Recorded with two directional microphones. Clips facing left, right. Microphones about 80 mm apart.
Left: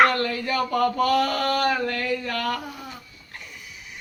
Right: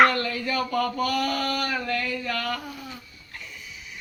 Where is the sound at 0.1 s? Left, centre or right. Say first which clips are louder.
Left 2 dB; left.